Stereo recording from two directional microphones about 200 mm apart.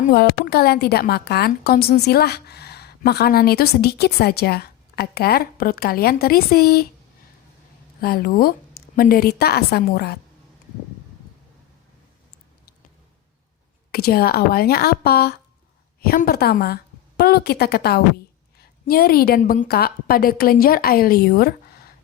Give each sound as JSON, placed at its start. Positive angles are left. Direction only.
{"t": 0.0, "sound": "a woman's voice", "side_deg": 50}
{"t": 8.0, "sound": "a woman's voice", "side_deg": 50}
{"t": 13.9, "sound": "a woman's voice", "side_deg": 50}